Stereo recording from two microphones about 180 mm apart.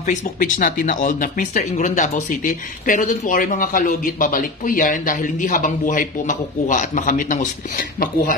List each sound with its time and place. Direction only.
0.0 s speech: 50° left (ahead or behind)